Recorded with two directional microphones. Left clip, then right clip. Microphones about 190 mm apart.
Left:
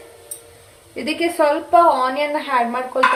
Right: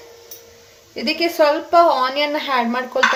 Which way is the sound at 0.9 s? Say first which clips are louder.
Right 1 dB; 10° right (ahead or behind).